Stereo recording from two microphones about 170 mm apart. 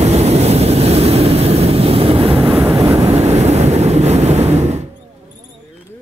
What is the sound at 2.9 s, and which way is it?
Vehicle, 40° right (ahead or behind).